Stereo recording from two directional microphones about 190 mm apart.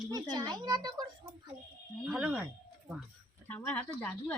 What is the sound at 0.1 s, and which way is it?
Speech, 20° right (ahead or behind).